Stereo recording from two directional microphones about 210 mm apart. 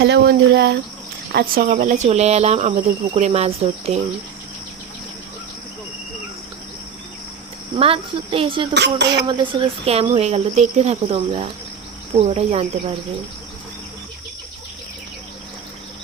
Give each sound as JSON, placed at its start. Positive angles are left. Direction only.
{"t": 0.0, "sound": "speech", "side_deg": -55}
{"t": 7.8, "sound": "speech", "side_deg": -25}
{"t": 8.7, "sound": "speech", "side_deg": -55}
{"t": 9.2, "sound": "speech", "side_deg": -20}